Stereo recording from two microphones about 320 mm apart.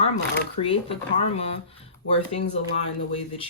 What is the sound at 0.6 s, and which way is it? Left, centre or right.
Speech, left.